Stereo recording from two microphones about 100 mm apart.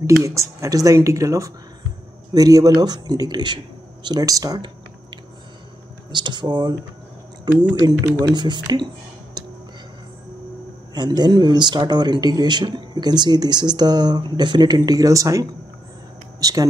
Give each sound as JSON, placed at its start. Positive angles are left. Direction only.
{"t": 0.0, "sound": "speech", "side_deg": -30}
{"t": 6.1, "sound": "speech", "side_deg": -45}
{"t": 7.7, "sound": "speech", "side_deg": -40}
{"t": 11.0, "sound": "speech", "side_deg": -45}